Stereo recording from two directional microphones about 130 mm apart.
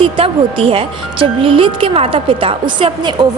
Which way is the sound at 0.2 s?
45° right (ahead or behind).